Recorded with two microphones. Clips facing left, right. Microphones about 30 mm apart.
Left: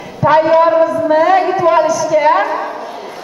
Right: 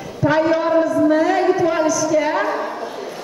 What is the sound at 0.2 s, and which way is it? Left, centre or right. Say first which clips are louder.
A man's voice: left 7 dB; left.